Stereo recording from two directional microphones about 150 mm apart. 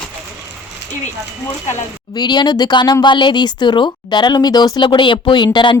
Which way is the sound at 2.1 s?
30° left (ahead or behind).